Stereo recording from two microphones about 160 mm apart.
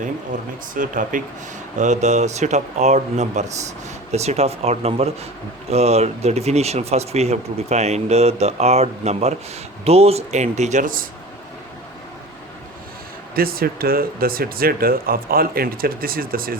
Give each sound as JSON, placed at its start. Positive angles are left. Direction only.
{"t": 0.8, "sound": "speech", "side_deg": -55}
{"t": 1.8, "sound": "speech", "side_deg": -45}
{"t": 13.3, "sound": "speech", "side_deg": -70}